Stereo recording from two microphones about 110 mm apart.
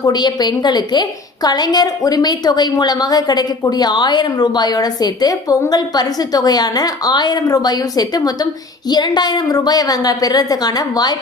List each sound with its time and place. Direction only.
0.0 s a woman's voice: 40° left (ahead or behind)